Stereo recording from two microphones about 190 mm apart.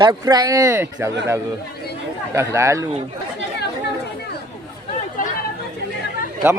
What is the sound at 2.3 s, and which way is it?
Speech, 15° right (ahead or behind).